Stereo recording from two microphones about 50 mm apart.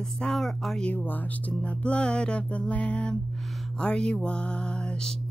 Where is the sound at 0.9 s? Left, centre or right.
Left.